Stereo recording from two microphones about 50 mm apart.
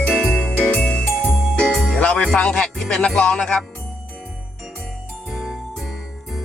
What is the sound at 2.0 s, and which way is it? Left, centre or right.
Music, left.